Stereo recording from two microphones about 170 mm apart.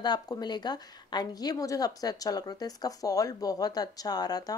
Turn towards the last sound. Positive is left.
turn(degrees=25)  # may be behind; listen again after turning